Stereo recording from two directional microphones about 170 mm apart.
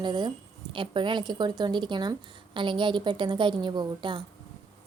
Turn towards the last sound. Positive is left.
turn(degrees=-25)  # may be behind; listen again after turning